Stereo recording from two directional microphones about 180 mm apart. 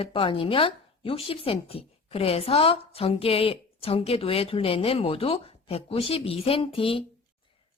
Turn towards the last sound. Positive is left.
turn(degrees=30)  # may be behind; listen again after turning